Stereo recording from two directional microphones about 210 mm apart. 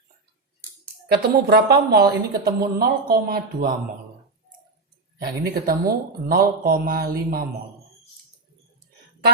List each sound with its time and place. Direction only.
1.0 s speech: 50° right (ahead or behind)
5.2 s speech: 50° right (ahead or behind)